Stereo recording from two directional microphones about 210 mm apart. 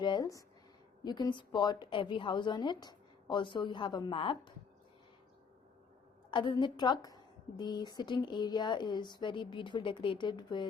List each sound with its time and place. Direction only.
0.0 s a woman's voice: 20° left (ahead or behind)
6.3 s a woman's voice: 20° left (ahead or behind)